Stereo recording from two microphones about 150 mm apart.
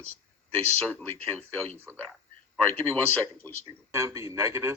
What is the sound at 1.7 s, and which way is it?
Speech, 15° right (ahead or behind).